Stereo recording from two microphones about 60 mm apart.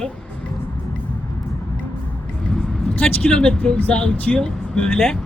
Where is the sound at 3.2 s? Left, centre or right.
Centre.